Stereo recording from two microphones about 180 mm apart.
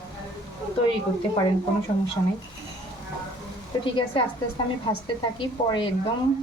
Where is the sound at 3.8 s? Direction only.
30° left (ahead or behind).